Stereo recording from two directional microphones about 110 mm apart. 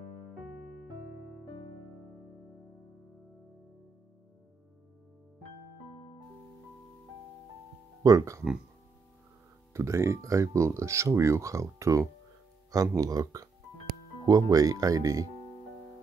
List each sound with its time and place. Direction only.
8.0 s speech: 30° right (ahead or behind)
9.8 s speech: 25° right (ahead or behind)